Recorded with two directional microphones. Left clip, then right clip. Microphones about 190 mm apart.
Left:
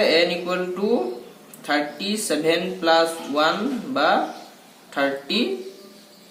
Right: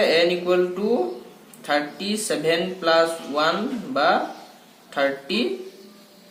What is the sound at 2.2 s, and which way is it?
Speech, 15° right (ahead or behind).